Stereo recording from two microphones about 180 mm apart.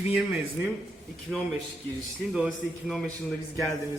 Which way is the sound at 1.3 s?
Centre (ahead or behind).